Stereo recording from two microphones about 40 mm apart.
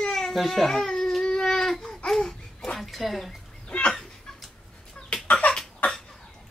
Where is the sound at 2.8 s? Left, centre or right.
Centre.